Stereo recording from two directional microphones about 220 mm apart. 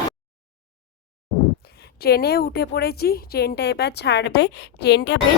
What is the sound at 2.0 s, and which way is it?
Speech, 45° left (ahead or behind).